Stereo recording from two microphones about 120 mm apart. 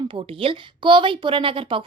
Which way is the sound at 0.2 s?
45° right (ahead or behind).